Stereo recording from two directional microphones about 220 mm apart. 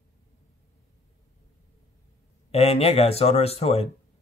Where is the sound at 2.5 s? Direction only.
25° left (ahead or behind).